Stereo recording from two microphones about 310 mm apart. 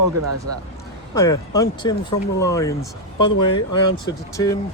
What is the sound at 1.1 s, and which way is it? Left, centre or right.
Speech, centre.